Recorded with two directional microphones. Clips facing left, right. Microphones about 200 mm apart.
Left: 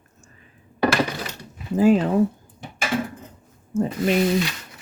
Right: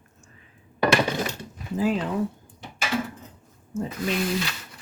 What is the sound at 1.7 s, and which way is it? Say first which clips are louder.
Speech: left 8 dB; 45° left (ahead or behind).